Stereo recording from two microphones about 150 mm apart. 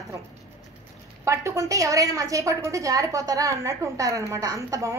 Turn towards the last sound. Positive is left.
turn(degrees=-20)  # may be behind; listen again after turning